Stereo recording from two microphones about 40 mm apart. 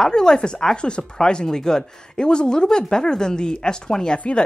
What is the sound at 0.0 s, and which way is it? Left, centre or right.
A woman's voice, centre.